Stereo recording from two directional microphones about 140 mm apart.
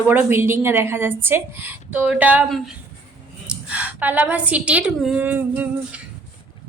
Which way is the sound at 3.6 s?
10° right (ahead or behind).